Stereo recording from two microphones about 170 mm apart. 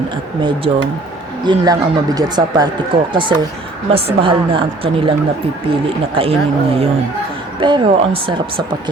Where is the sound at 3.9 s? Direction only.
30° right (ahead or behind).